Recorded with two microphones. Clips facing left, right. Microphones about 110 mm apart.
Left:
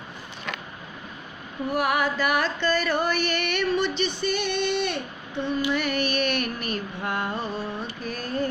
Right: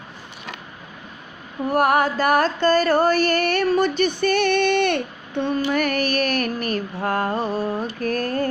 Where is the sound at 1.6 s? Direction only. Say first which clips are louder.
Right 6 dB; 45° right (ahead or behind); by 5.6 s 60° right (ahead or behind).